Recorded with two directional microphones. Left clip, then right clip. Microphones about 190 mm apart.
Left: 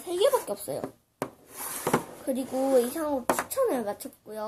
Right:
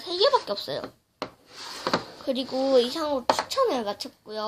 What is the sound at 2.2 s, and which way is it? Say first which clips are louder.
A child's voice: right 2 dB; 20° right (ahead or behind).